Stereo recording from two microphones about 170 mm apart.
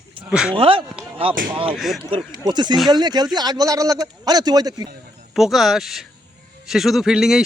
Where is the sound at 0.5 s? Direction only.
30° right (ahead or behind).